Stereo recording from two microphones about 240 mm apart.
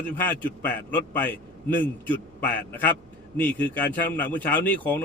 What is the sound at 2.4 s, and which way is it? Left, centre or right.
Speech, centre.